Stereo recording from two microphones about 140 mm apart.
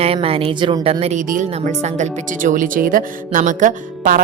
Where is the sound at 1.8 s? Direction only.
55° right (ahead or behind).